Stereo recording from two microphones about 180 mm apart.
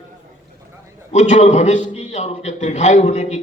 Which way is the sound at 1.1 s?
40° left (ahead or behind).